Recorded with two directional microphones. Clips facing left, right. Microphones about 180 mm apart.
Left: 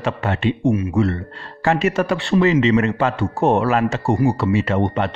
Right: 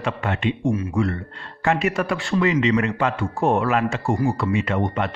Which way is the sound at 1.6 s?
40° left (ahead or behind).